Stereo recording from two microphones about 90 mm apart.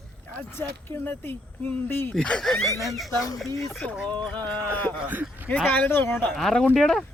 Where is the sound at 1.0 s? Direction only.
20° left (ahead or behind).